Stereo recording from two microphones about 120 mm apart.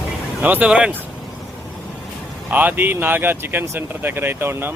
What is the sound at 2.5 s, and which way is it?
Speech, 15° right (ahead or behind).